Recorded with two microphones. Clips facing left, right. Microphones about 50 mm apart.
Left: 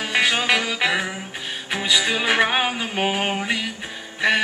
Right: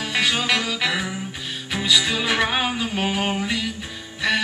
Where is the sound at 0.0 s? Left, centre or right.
Centre.